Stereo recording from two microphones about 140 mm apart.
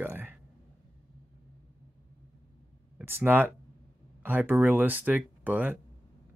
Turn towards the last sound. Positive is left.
turn(degrees=-10)  # may be behind; listen again after turning